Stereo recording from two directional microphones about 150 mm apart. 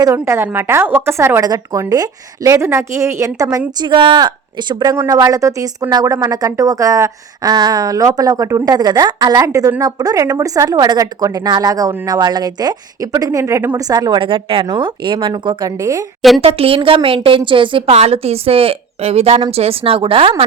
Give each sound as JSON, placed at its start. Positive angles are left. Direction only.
{"t": 0.0, "sound": "speech", "side_deg": -20}
{"t": 16.4, "sound": "a woman's voice", "side_deg": -40}